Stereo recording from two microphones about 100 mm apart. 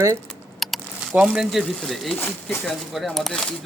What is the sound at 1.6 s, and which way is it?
Speech, 5° left (ahead or behind).